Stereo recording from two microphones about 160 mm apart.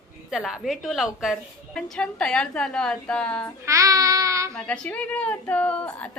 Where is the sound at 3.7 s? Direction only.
20° right (ahead or behind).